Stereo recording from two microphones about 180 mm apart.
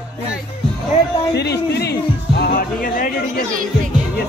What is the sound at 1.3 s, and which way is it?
Music, 65° left (ahead or behind).